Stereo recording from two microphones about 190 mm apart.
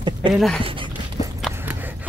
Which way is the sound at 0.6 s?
30° right (ahead or behind).